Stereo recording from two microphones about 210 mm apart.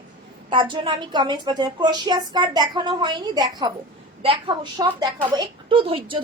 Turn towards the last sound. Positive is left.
turn(degrees=-25)  # may be behind; listen again after turning